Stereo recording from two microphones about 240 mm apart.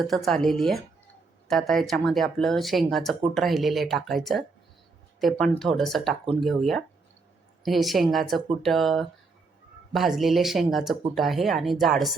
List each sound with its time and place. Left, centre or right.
0.0 s speech: centre